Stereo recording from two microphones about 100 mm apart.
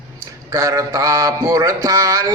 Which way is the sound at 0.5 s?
35° right (ahead or behind).